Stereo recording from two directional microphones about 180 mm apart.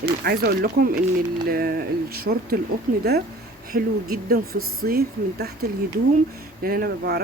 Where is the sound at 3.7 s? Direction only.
55° right (ahead or behind).